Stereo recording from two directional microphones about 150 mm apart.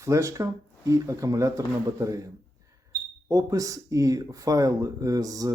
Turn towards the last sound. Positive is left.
turn(degrees=-25)  # may be behind; listen again after turning